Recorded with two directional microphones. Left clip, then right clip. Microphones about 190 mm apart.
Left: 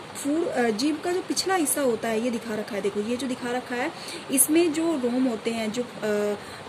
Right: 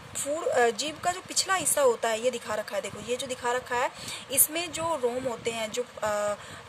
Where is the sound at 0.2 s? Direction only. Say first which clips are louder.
Even; 50° right (ahead or behind).